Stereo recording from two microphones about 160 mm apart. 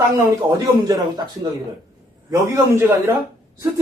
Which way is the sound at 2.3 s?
20° right (ahead or behind).